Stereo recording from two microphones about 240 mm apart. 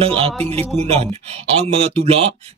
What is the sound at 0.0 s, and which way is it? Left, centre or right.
Speech, right.